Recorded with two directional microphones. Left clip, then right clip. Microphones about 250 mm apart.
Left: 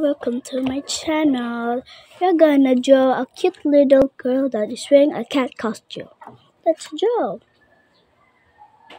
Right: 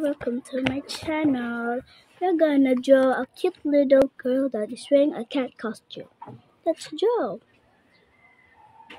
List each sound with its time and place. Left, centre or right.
0.0 s a woman's voice: centre